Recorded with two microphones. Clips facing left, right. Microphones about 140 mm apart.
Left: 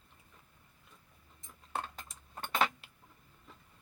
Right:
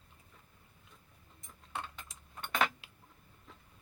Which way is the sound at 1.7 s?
40° left (ahead or behind).